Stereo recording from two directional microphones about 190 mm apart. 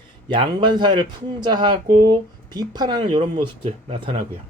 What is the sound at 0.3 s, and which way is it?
Speech, 25° right (ahead or behind).